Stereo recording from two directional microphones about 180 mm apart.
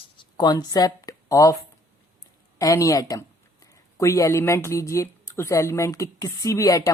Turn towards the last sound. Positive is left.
turn(degrees=20)  # may be behind; listen again after turning